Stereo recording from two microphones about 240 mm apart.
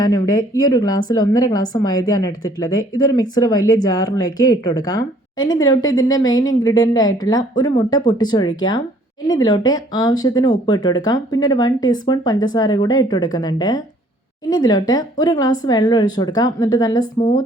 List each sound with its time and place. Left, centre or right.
0.0 s speech: centre